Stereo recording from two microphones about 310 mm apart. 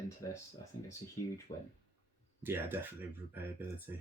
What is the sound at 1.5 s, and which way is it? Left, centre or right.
Speech, left.